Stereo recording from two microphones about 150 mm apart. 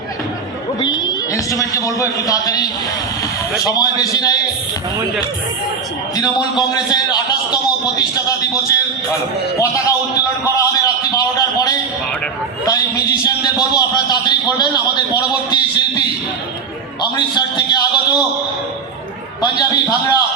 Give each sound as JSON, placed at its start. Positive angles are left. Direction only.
{"t": 0.8, "sound": "a man's voice", "side_deg": 30}
{"t": 6.1, "sound": "a man's voice", "side_deg": 25}
{"t": 17.2, "sound": "a man's voice", "side_deg": 30}
{"t": 19.4, "sound": "a man's voice", "side_deg": 25}